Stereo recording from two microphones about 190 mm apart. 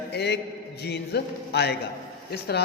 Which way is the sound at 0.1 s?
60° left (ahead or behind).